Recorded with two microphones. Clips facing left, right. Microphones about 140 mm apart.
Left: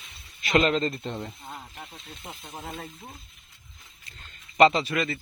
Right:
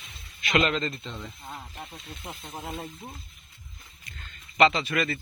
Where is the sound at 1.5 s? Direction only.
Centre (ahead or behind).